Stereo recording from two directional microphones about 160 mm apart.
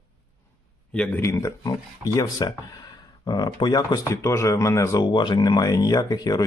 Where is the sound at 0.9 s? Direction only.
10° left (ahead or behind).